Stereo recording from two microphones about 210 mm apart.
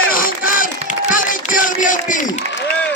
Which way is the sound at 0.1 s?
40° left (ahead or behind).